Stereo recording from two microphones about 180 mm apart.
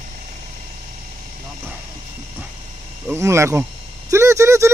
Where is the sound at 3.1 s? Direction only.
15° right (ahead or behind).